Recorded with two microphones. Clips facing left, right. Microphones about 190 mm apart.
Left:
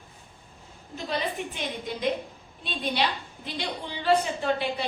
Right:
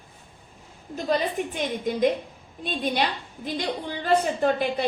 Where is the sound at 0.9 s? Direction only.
45° right (ahead or behind).